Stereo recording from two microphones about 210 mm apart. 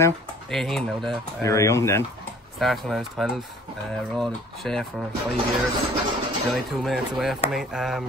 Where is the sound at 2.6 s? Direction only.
Centre (ahead or behind).